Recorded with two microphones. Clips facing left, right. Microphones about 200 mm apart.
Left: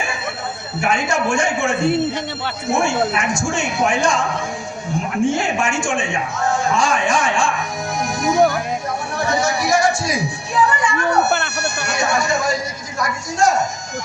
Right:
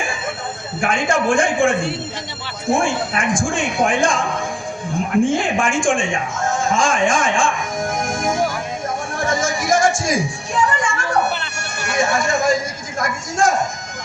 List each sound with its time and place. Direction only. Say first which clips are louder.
0.8 s speech: right 1 dB; 50° right (ahead or behind)
5.4 s a woman's voice: right 1 dB; 50° right (ahead or behind)